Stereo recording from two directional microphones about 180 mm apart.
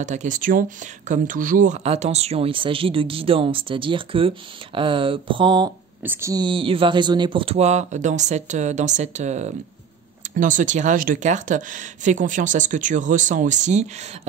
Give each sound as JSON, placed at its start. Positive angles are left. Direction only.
{"t": 0.0, "sound": "speech", "side_deg": -40}